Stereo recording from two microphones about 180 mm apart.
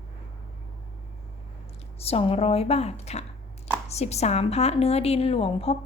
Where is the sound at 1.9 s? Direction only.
35° left (ahead or behind).